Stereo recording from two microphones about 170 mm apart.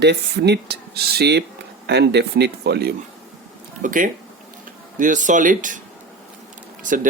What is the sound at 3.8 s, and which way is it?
Speech, 50° right (ahead or behind).